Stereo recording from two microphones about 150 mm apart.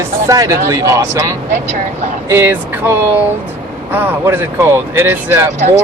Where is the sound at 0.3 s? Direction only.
20° right (ahead or behind).